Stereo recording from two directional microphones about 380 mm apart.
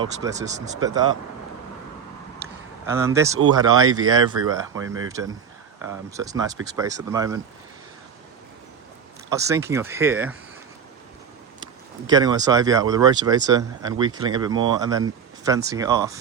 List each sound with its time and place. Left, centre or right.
0.2 s speech: centre
2.8 s speech: centre
3.6 s speech: right
4.1 s speech: centre
9.3 s speech: centre
12.0 s speech: centre